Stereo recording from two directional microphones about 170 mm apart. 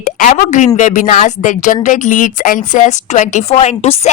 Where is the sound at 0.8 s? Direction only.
50° left (ahead or behind).